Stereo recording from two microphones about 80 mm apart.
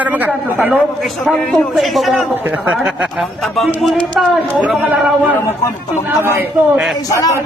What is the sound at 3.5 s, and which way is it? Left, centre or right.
Speech, centre.